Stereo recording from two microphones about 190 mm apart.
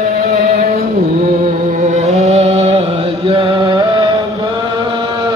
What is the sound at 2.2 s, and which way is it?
Music, 35° right (ahead or behind).